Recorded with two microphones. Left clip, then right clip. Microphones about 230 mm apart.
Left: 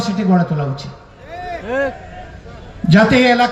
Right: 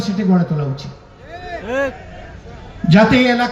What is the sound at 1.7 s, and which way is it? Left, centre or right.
Speech, centre.